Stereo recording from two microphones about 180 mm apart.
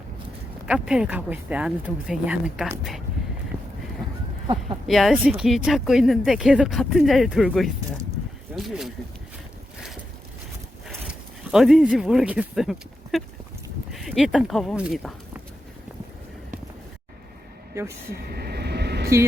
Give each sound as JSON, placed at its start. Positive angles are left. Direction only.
{"t": 0.7, "sound": "speech", "side_deg": -5}
{"t": 4.0, "sound": "a sound", "side_deg": -20}
{"t": 4.9, "sound": "speech", "side_deg": 0}
{"t": 10.8, "sound": "speech", "side_deg": 0}
{"t": 17.7, "sound": "speech", "side_deg": -15}
{"t": 18.1, "sound": "vehicle", "side_deg": -60}